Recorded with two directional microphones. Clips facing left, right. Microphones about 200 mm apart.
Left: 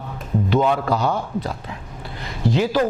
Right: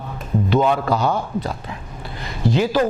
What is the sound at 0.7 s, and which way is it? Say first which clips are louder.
A man's voice: right 1 dB; 15° right (ahead or behind).